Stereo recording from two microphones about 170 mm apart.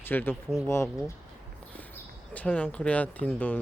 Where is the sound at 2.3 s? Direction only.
10° left (ahead or behind).